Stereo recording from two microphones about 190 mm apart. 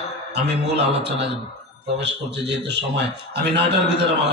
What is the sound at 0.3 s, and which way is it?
Speech, 60° right (ahead or behind).